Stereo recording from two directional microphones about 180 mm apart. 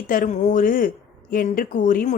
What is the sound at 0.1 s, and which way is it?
A man's voice, 45° left (ahead or behind).